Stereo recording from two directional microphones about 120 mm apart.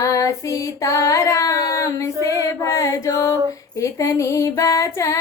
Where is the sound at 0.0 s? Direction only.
25° left (ahead or behind).